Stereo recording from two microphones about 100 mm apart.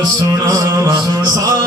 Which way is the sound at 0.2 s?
40° right (ahead or behind).